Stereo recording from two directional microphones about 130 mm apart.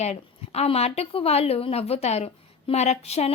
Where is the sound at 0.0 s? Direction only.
55° left (ahead or behind).